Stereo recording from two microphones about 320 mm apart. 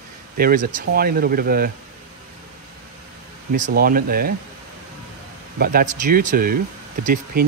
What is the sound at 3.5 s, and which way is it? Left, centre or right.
Speech, right.